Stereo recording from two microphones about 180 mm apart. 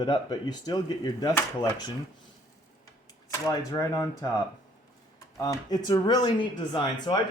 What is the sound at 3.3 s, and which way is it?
Speech, 20° left (ahead or behind).